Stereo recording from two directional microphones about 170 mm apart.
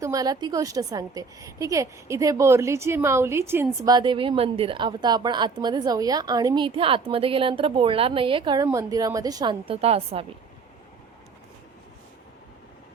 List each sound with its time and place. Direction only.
0.0 s a woman's voice: 20° right (ahead or behind)
8.6 s a woman's voice: 20° right (ahead or behind); by 10.2 s 35° right (ahead or behind)